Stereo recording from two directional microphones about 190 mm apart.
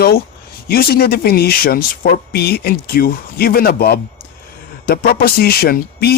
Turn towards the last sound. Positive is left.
turn(degrees=55)  # may be behind; listen again after turning